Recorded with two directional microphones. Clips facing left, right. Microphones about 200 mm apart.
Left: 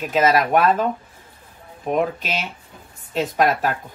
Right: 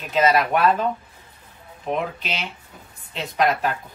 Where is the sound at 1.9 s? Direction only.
50° left (ahead or behind).